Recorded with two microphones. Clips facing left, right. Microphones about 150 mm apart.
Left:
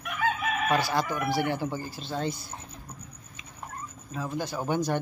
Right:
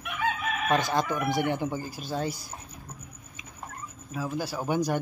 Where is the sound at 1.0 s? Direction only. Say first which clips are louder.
Right 1 dB; 5° left (ahead or behind).